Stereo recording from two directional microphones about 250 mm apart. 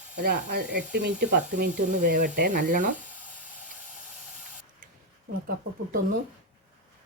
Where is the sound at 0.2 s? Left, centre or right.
Right.